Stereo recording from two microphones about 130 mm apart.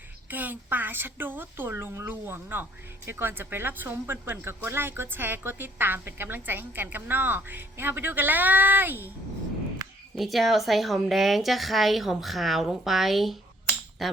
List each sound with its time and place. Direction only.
0.3 s a woman's voice: 15° right (ahead or behind)
10.2 s speech: centre (ahead or behind)